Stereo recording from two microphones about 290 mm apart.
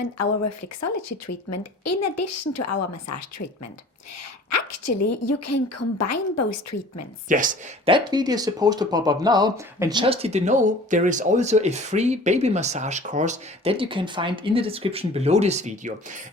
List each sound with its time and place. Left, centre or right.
1.5 s a woman's voice: left
7.3 s speech: right
7.9 s speech: centre